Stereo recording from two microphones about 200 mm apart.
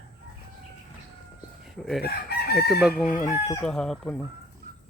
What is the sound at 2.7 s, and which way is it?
Speech, centre (ahead or behind).